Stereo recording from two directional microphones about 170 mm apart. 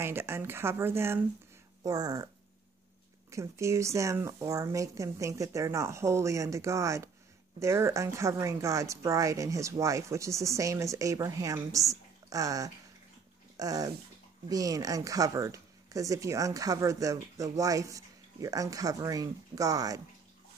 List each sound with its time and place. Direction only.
0.0 s a woman's voice: 15° right (ahead or behind)
3.3 s a woman's voice: 15° right (ahead or behind)